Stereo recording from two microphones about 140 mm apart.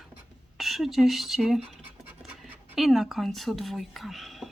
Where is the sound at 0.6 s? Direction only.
Centre (ahead or behind).